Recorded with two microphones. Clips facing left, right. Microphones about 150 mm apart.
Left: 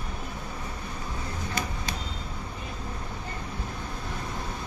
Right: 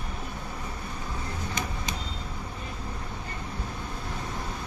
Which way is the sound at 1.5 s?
20° right (ahead or behind).